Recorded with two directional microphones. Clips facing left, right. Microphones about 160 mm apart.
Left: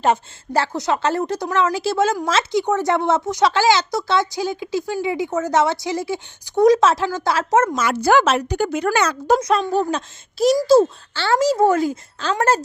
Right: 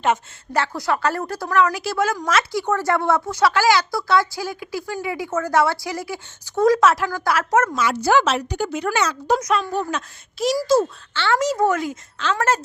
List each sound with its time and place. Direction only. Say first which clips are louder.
0.0 s a woman's voice: left 2 dB; 35° left (ahead or behind)
7.8 s a woman's voice: left 2 dB; 50° left (ahead or behind)
9.4 s speech: left 4 dB; 30° left (ahead or behind)